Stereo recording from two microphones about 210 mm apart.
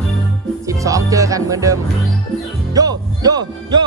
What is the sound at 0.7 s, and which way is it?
Speech, 15° right (ahead or behind).